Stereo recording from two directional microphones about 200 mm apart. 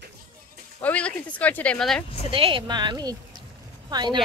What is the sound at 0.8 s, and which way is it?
Speech, 5° left (ahead or behind).